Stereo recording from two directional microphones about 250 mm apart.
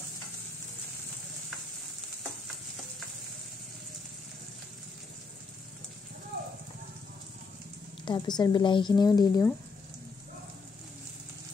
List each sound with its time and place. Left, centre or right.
8.0 s speech: centre